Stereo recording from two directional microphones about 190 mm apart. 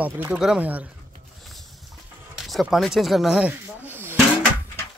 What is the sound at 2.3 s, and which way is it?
Speech, centre (ahead or behind).